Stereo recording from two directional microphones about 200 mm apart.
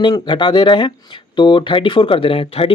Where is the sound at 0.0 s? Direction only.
20° left (ahead or behind).